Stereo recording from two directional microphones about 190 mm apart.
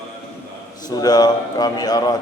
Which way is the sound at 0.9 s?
20° left (ahead or behind).